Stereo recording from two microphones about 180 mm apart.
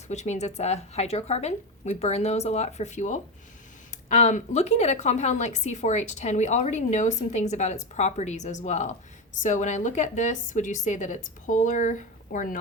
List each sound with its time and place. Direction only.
0.1 s a woman's voice: 40° left (ahead or behind)